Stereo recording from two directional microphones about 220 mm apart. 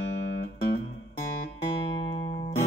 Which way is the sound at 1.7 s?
20° left (ahead or behind).